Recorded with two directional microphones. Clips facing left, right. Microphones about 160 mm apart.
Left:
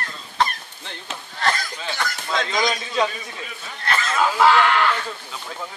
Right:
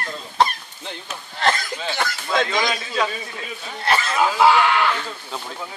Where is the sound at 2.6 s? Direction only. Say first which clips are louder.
Left 1 dB; 20° left (ahead or behind).